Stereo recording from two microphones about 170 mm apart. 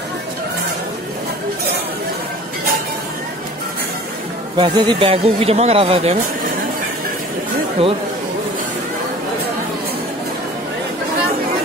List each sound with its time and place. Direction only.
4.6 s speech: 25° right (ahead or behind)
7.8 s speech: 35° right (ahead or behind)